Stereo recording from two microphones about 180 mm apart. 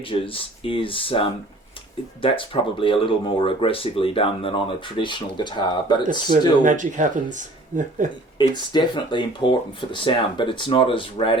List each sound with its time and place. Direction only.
0.0 s speech: 30° left (ahead or behind)
6.6 s speech: 45° right (ahead or behind)
8.4 s speech: 25° left (ahead or behind)